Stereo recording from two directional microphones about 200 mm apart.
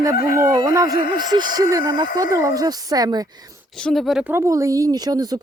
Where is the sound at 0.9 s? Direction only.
45° left (ahead or behind).